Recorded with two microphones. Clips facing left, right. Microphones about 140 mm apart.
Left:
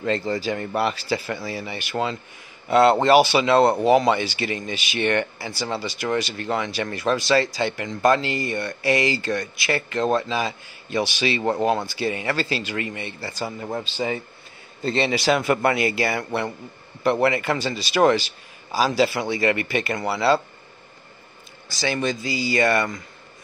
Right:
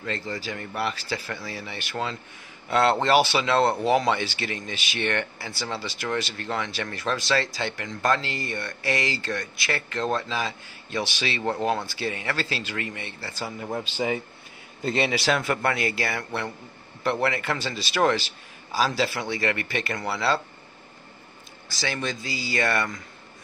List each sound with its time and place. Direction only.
0.4 s speech: 25° left (ahead or behind)
1.3 s speech: 10° left (ahead or behind)
13.9 s speech: 15° right (ahead or behind); by 20.4 s 10° left (ahead or behind)
21.6 s speech: centre (ahead or behind)